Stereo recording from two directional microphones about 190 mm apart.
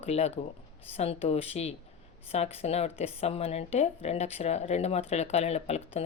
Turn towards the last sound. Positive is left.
turn(degrees=35)  # may be behind; listen again after turning